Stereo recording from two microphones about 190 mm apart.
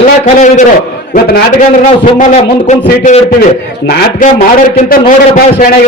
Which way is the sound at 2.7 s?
40° left (ahead or behind).